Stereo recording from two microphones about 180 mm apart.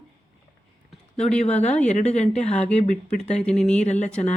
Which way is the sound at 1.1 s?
5° left (ahead or behind).